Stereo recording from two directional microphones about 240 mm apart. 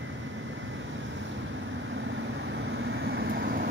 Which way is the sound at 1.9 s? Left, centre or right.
Right.